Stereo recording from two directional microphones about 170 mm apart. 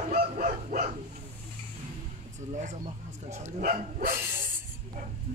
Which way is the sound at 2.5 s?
45° right (ahead or behind).